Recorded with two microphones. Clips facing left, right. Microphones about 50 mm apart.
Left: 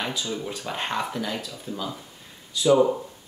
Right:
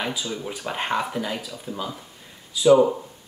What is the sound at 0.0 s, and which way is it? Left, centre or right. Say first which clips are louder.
Speech: right 1 dB; centre.